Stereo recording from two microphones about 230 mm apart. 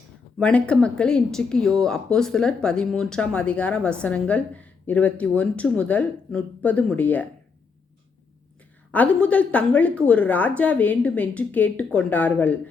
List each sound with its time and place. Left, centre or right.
0.3 s speech: centre
8.9 s a woman's voice: centre